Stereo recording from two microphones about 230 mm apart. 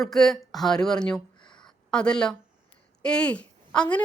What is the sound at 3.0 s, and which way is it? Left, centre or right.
Speech, centre.